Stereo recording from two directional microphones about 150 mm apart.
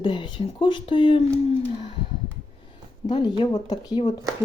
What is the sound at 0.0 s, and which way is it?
Speech, 30° left (ahead or behind).